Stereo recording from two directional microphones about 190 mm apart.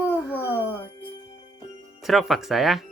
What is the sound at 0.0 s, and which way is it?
Music, 10° left (ahead or behind).